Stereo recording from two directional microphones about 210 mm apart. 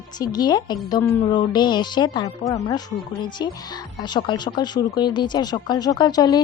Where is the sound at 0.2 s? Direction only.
20° left (ahead or behind).